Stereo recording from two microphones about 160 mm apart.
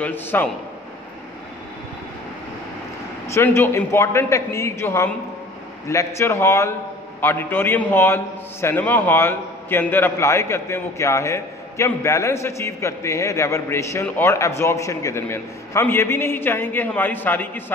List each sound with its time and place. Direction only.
0.0 s a man's voice: 10° left (ahead or behind)
3.3 s a man's voice: 15° left (ahead or behind)